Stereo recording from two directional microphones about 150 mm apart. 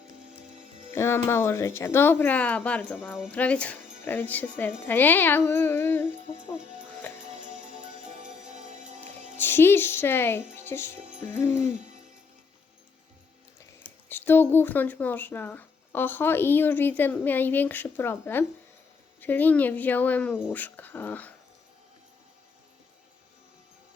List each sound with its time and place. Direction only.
0.9 s speech: 15° left (ahead or behind)
6.6 s speech: 55° right (ahead or behind)
7.2 s music: 55° right (ahead or behind)
9.4 s speech: 15° left (ahead or behind)
13.8 s speech: 15° left (ahead or behind)